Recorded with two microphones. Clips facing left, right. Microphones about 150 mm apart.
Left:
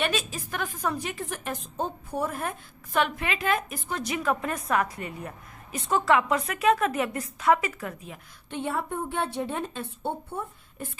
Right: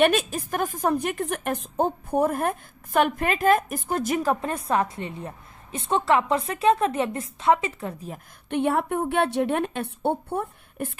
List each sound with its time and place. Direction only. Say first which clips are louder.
0.0 s a woman's voice: right 8 dB; 55° right (ahead or behind); by 8.2 s 35° right (ahead or behind)
8.4 s a woman's voice: right 7 dB; 65° right (ahead or behind)